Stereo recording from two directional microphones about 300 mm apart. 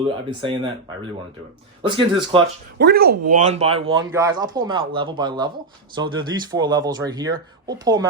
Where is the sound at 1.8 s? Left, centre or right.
Centre.